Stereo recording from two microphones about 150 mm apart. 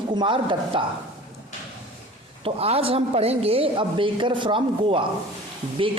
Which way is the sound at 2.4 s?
40° right (ahead or behind).